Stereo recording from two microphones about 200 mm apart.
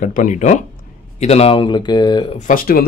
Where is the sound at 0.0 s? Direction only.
40° left (ahead or behind); by 2.3 s 20° left (ahead or behind).